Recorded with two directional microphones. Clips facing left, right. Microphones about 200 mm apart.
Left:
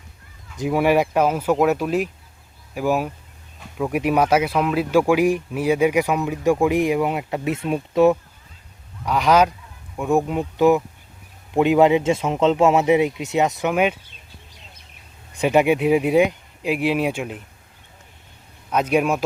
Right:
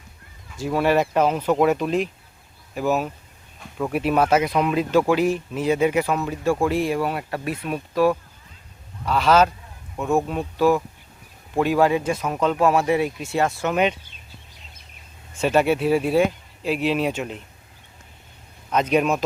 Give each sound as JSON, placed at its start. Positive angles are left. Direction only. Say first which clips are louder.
{"t": 0.5, "sound": "speech", "louder": "left 2 dB", "side_deg": 15}
{"t": 15.3, "sound": "speech", "louder": "left 2 dB", "side_deg": 15}
{"t": 18.7, "sound": "speech", "louder": "left 1 dB", "side_deg": 10}